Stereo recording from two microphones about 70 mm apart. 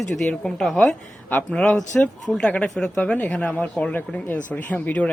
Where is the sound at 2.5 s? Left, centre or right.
Centre.